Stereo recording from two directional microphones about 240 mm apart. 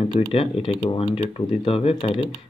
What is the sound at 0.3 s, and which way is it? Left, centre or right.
Speech, left.